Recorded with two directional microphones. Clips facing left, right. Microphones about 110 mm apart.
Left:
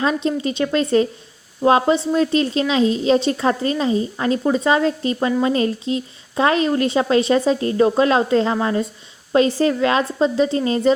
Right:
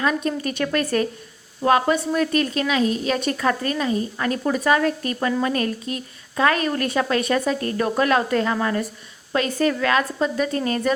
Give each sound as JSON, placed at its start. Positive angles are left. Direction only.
{"t": 0.0, "sound": "a woman's voice", "side_deg": 25}